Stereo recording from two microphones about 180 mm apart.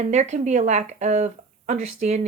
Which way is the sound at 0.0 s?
40° right (ahead or behind).